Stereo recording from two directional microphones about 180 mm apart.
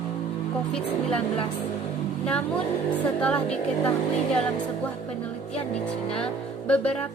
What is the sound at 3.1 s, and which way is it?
Speech, 5° left (ahead or behind).